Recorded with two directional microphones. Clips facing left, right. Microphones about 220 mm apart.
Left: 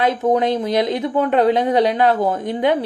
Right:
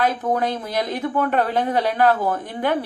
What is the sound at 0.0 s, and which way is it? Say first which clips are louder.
A woman's voice: left 4 dB; 20° left (ahead or behind).